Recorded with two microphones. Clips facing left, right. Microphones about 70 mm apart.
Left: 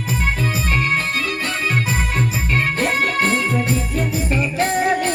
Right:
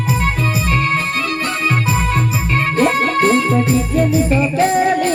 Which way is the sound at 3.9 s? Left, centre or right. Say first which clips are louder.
Right 7 dB; right.